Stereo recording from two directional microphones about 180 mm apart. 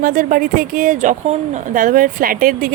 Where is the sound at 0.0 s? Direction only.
50° right (ahead or behind).